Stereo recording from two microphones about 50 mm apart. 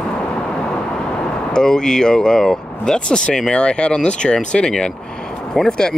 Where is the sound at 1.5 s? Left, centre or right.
Centre.